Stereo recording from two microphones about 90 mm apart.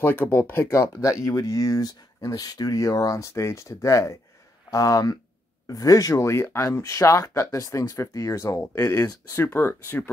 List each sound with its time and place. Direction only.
0.0 s speech: 25° left (ahead or behind)
8.5 s speech: 25° left (ahead or behind)